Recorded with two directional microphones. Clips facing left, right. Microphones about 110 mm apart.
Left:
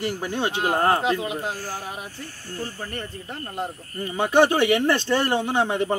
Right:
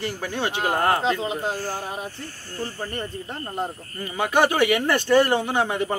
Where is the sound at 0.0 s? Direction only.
15° left (ahead or behind); by 3.1 s centre (ahead or behind).